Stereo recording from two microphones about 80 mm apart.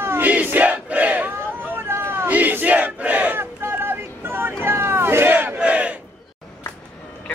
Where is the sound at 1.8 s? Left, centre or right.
Right.